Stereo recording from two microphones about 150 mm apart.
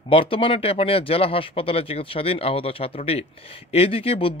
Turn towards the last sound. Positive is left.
turn(degrees=40)  # may be behind; listen again after turning